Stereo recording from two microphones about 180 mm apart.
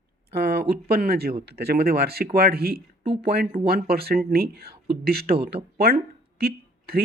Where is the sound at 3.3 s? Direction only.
60° right (ahead or behind).